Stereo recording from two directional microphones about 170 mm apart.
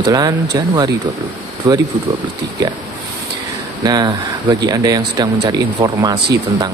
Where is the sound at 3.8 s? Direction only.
25° right (ahead or behind).